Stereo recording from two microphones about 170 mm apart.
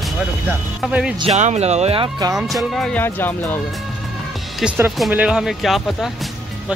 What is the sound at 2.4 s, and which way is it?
Speech, centre (ahead or behind).